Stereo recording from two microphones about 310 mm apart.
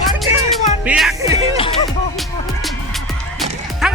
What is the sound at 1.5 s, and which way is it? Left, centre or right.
Music, centre.